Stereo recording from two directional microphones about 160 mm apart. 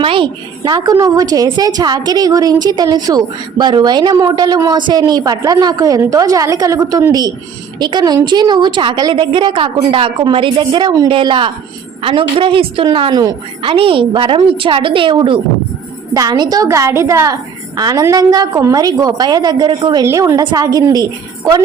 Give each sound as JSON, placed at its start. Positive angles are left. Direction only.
{"t": 0.0, "sound": "a woman's voice", "side_deg": -30}